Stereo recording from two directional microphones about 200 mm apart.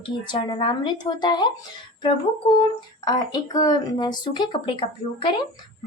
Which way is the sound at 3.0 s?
20° left (ahead or behind).